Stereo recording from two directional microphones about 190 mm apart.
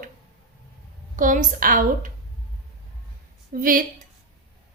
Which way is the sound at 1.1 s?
45° right (ahead or behind).